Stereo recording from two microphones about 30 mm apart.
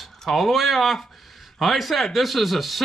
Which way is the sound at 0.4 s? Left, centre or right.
Centre.